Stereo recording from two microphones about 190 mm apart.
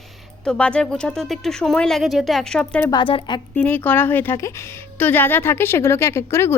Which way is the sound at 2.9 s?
25° left (ahead or behind).